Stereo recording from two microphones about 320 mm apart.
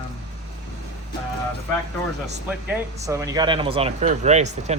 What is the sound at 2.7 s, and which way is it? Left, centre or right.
Speech, centre.